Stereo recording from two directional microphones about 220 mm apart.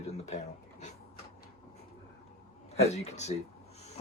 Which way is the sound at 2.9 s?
30° left (ahead or behind).